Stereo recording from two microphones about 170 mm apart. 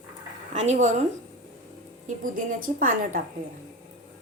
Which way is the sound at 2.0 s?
55° right (ahead or behind).